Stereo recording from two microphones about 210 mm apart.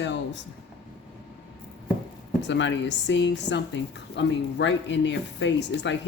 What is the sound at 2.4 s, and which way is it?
A woman's voice, 60° left (ahead or behind).